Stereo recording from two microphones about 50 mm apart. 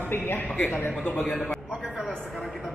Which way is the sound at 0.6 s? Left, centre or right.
Left.